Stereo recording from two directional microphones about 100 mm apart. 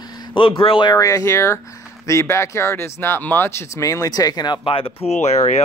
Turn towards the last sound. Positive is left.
turn(degrees=90)